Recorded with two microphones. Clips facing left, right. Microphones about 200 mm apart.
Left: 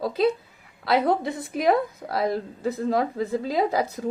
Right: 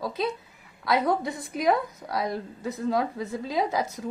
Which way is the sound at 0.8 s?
30° left (ahead or behind).